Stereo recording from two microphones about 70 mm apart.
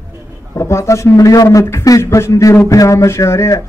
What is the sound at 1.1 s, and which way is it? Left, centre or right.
A man's voice, left.